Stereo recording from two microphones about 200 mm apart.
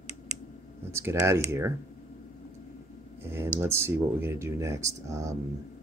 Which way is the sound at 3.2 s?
10° right (ahead or behind).